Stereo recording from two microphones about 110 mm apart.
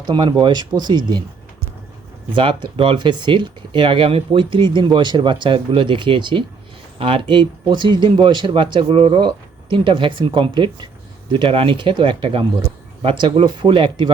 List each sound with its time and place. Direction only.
0.0 s speech: 45° right (ahead or behind)
2.3 s speech: 50° right (ahead or behind)